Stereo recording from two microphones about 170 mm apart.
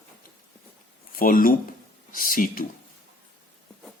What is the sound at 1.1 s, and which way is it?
Speech, 55° left (ahead or behind).